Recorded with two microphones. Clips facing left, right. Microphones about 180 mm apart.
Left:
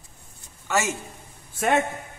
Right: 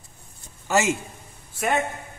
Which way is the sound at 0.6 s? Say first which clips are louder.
Right 4 dB; 25° right (ahead or behind).